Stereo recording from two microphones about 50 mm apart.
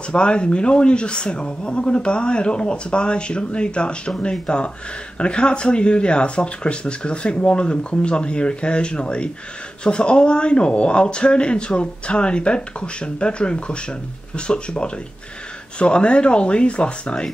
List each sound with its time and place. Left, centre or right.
0.1 s speech: left